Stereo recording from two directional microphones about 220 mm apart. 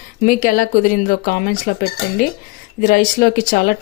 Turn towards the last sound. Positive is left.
turn(degrees=40)  # may be behind; listen again after turning